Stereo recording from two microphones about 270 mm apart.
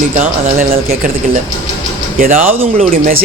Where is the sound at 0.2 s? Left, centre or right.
Right.